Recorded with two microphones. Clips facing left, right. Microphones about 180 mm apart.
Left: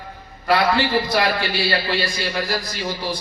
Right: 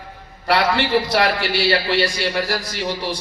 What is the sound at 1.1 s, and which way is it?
A man's voice, 75° right (ahead or behind).